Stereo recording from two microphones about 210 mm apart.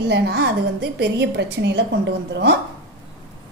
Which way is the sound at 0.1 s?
50° right (ahead or behind).